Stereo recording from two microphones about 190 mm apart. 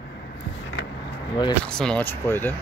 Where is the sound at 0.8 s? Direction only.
70° left (ahead or behind).